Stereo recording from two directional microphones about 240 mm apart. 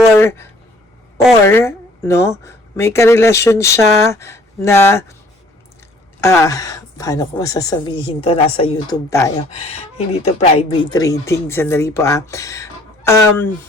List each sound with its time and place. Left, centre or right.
0.2 s speech: centre
1.5 s a woman's voice: centre
6.1 s a woman's voice: centre
9.6 s speech: left
10.9 s a woman's voice: centre